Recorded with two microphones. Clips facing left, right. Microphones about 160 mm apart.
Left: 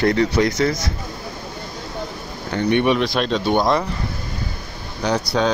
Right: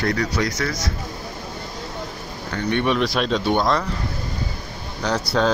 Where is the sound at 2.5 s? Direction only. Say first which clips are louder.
Left 4 dB; 15° left (ahead or behind).